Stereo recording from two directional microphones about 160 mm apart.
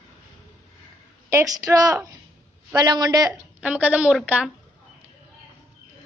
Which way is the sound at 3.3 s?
10° right (ahead or behind).